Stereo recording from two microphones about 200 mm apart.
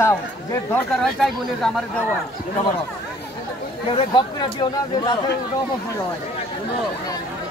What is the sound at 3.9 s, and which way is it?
Speech, 25° left (ahead or behind).